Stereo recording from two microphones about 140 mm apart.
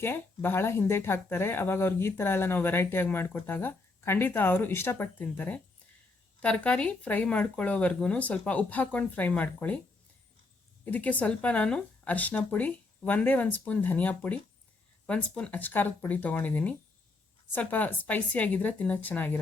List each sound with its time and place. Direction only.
0.0 s speech: 15° left (ahead or behind)
10.8 s speech: 10° left (ahead or behind)